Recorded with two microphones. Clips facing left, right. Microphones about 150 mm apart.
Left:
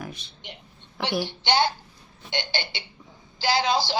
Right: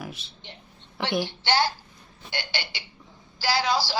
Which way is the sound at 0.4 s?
15° left (ahead or behind).